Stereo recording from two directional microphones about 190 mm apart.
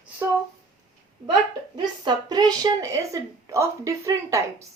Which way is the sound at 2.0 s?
20° right (ahead or behind).